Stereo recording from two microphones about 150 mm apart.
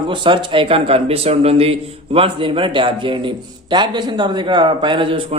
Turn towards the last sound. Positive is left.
turn(degrees=-35)  # may be behind; listen again after turning